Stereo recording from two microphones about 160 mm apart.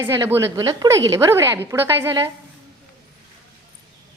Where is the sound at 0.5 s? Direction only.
30° right (ahead or behind).